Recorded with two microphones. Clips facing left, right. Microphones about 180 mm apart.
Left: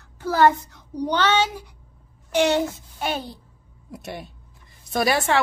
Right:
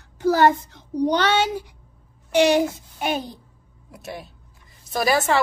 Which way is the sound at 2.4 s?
15° right (ahead or behind).